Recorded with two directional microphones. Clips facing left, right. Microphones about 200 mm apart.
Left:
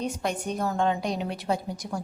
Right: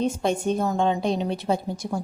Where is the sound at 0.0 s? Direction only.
25° right (ahead or behind).